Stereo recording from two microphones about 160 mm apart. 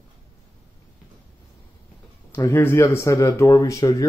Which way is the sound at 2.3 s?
15° left (ahead or behind).